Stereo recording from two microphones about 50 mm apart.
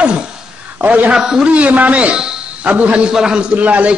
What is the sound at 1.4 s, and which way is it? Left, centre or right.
A man's voice, right.